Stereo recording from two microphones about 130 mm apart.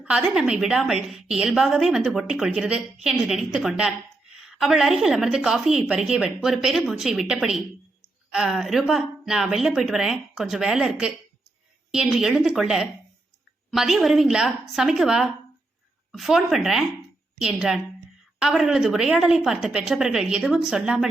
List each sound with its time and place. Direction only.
0.0 s a woman's voice: 5° right (ahead or behind)